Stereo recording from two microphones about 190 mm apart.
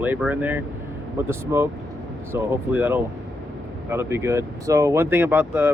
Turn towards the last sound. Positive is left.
turn(degrees=-10)  # may be behind; listen again after turning